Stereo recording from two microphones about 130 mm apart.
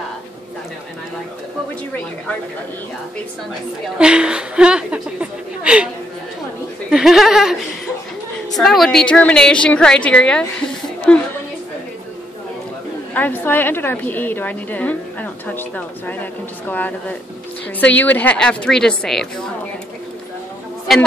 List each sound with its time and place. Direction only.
3.8 s a woman's voice: 5° right (ahead or behind)
6.9 s speech: centre (ahead or behind)
8.5 s a woman's voice: centre (ahead or behind)
13.1 s a woman's voice: 15° left (ahead or behind)
20.9 s speech: centre (ahead or behind)